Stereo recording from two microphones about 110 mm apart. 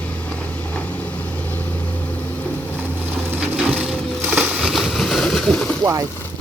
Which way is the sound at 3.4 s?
10° right (ahead or behind).